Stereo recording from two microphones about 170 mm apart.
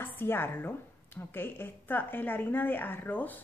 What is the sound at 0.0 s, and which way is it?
A woman's voice, 10° left (ahead or behind).